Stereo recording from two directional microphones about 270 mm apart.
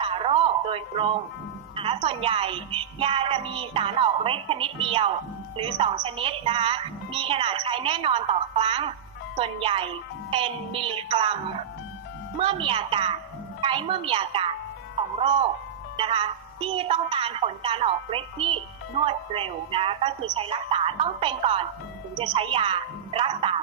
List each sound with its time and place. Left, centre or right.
0.0 s music: right
1.7 s a woman's voice: centre
12.4 s a woman's voice: centre
16.0 s a woman's voice: centre